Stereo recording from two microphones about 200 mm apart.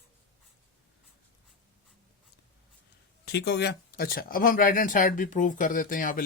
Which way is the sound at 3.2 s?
60° left (ahead or behind).